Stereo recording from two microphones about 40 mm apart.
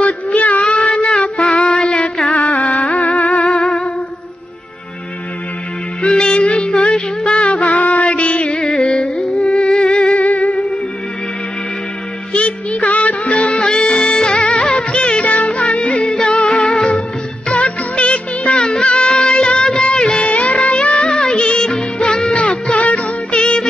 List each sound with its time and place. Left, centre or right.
0.0 s a sound: left
0.7 s music: left
2.3 s music: left
3.6 s music: centre
6.0 s music: centre
8.6 s music: centre
9.5 s music: left
10.2 s music: left
12.3 s music: left
17.5 s music of bollywood: left
19.8 s music: left
22.3 s music: left
23.4 s music: left